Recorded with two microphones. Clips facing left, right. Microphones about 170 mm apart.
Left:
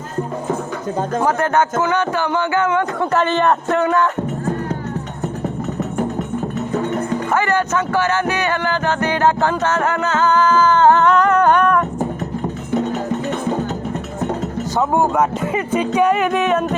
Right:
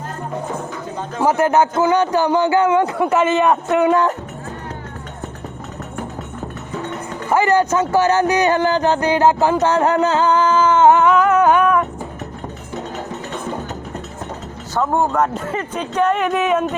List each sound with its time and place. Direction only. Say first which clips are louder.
1.2 s a man's voice: right 4 dB; 15° right (ahead or behind)
7.3 s a man's voice: right 6 dB; 15° right (ahead or behind)
10.0 s a man's voice: right 1 dB; 30° right (ahead or behind); by 11.9 s 5° right (ahead or behind)
14.8 s speech: left 1 dB; 5° left (ahead or behind)